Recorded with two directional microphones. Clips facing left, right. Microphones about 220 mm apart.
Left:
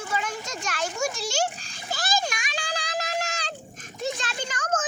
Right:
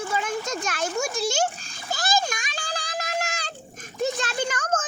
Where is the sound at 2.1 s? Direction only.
45° right (ahead or behind).